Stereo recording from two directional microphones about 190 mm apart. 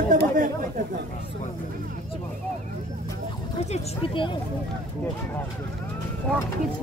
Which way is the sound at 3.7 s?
25° left (ahead or behind).